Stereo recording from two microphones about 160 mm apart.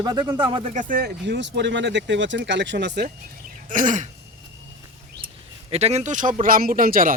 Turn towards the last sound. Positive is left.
turn(degrees=-60)  # may be behind; listen again after turning